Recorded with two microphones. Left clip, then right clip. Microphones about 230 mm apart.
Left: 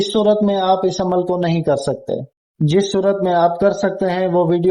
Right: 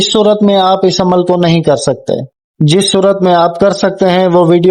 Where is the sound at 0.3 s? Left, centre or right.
Right.